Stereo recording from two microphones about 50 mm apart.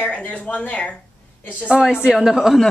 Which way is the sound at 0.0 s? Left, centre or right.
Left.